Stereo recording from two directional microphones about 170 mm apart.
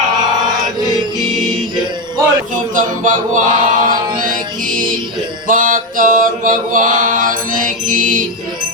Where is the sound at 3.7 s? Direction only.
55° right (ahead or behind).